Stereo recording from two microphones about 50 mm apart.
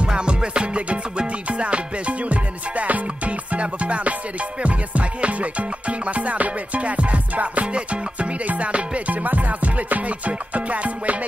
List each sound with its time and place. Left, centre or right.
0.0 s music: centre